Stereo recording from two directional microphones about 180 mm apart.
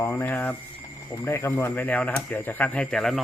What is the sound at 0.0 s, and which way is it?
Speech, 15° left (ahead or behind).